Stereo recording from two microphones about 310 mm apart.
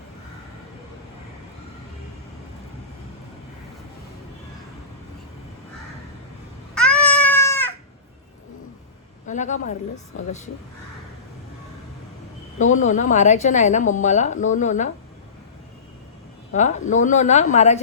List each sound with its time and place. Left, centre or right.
6.7 s a sound: centre
9.2 s a woman's voice: left
12.7 s a woman's voice: left
16.5 s a woman's voice: left